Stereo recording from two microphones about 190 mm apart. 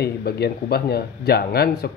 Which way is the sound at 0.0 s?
55° left (ahead or behind).